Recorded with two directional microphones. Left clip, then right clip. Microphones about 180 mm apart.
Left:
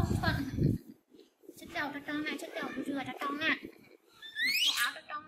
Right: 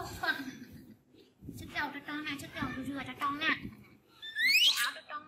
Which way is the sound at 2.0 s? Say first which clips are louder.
Left 2 dB; 5° left (ahead or behind).